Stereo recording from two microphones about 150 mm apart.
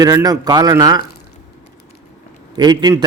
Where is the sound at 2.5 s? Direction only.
30° right (ahead or behind).